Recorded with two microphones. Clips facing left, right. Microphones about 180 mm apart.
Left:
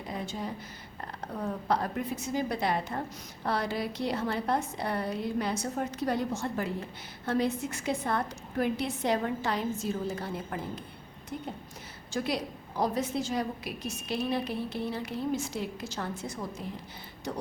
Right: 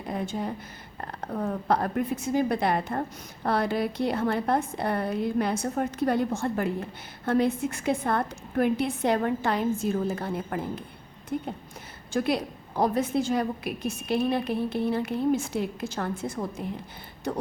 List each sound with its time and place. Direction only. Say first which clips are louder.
0.0 s a woman's voice: right 5 dB; 55° right (ahead or behind)